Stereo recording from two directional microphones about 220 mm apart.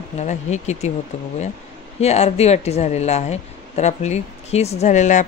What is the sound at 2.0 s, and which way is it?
Speech, 30° left (ahead or behind).